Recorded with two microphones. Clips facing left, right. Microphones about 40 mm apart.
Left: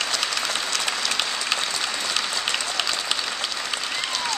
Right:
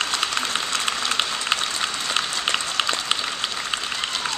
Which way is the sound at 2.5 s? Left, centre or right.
Right.